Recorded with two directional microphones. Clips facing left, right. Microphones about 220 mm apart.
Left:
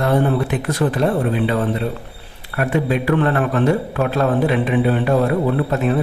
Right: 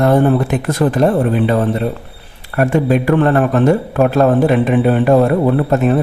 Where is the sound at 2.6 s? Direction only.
45° right (ahead or behind).